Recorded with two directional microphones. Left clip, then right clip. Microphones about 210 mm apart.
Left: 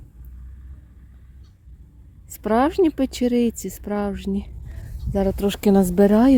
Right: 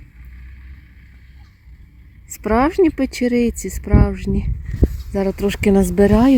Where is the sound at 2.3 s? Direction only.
Centre (ahead or behind).